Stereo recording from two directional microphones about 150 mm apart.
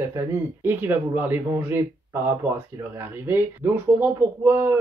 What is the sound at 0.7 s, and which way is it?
Speech, 15° right (ahead or behind).